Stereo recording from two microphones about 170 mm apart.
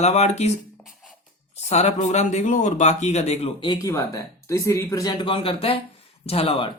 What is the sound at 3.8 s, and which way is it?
Speech, 20° left (ahead or behind).